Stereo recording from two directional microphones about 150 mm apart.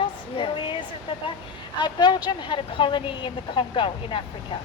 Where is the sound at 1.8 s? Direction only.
30° left (ahead or behind).